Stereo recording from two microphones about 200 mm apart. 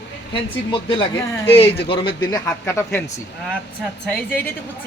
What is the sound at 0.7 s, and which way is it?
A man's voice, 25° left (ahead or behind).